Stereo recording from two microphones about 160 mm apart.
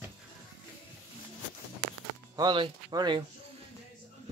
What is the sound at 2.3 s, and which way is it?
Speech, 30° right (ahead or behind).